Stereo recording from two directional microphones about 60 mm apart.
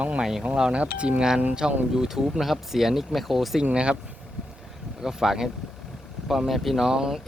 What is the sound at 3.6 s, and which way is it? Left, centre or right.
Speech, centre.